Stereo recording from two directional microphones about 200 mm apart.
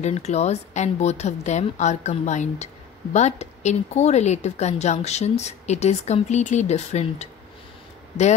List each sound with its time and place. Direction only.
0.0 s a woman's voice: 35° left (ahead or behind)